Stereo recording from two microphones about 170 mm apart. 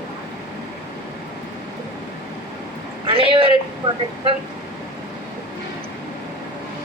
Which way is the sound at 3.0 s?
30° right (ahead or behind).